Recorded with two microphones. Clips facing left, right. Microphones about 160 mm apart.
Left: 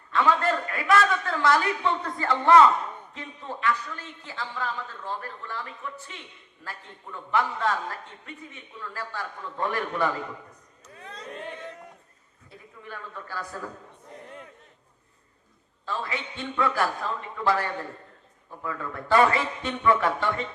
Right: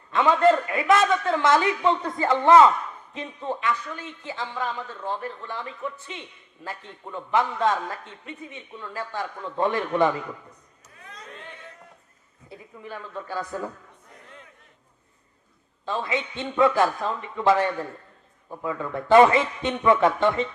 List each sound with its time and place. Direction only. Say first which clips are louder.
0.1 s a man's voice: right 5 dB; 20° right (ahead or behind)
11.1 s a sound: left 5 dB; 35° left (ahead or behind)
12.5 s a woman's voice: right 4 dB; 20° right (ahead or behind)
15.9 s a man's voice: right 5 dB; 20° right (ahead or behind)